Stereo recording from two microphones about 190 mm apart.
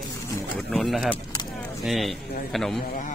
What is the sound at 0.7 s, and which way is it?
A man's voice, centre (ahead or behind).